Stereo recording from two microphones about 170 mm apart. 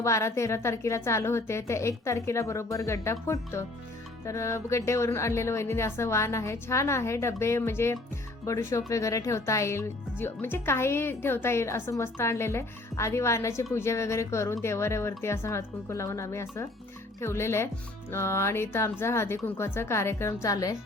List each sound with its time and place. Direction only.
0.0 s speech: 15° left (ahead or behind)